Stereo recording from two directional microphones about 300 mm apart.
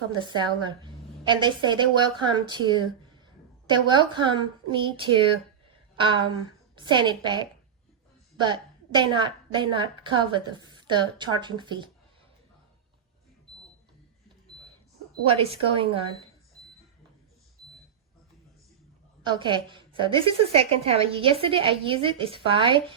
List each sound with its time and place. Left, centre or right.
0.2 s a woman's voice: centre
13.5 s a sound: centre
15.3 s a woman's voice: centre
19.2 s a woman's voice: centre